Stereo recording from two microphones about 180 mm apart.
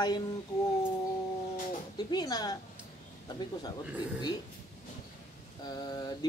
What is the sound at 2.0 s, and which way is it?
Speech, 25° left (ahead or behind).